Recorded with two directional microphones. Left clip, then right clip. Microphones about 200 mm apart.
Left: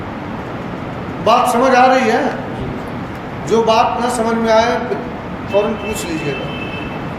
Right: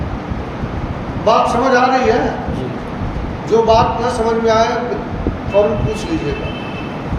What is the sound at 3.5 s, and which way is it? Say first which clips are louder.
A man's voice: right 1 dB; 45° left (ahead or behind).